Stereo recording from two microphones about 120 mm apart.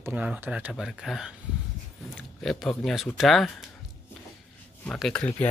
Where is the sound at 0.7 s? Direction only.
Centre (ahead or behind).